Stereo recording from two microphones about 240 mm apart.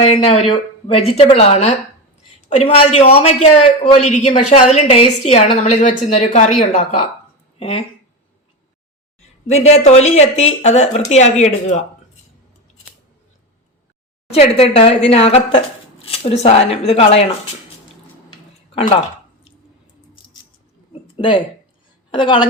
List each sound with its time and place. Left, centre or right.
0.0 s speech: left
9.5 s speech: left
14.3 s speech: left
18.7 s speech: left
20.2 s a sound: centre
21.2 s speech: centre